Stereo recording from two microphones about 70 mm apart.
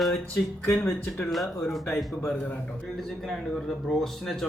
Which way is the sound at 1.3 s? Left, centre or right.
Centre.